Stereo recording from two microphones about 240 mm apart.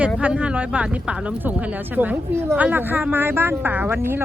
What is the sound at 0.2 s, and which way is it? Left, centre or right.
A woman's voice, centre.